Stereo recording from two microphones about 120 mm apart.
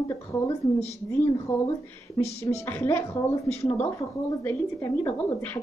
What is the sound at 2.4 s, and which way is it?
Speech, 20° left (ahead or behind).